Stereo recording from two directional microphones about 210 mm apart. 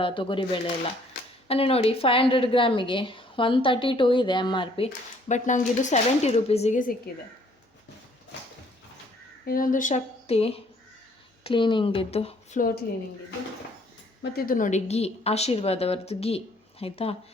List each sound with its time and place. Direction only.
0.0 s a woman's voice: 25° left (ahead or behind)
5.3 s speech: 35° left (ahead or behind)
9.5 s a woman's voice: 40° left (ahead or behind)
14.2 s a woman's voice: 45° left (ahead or behind); by 17.2 s 30° left (ahead or behind)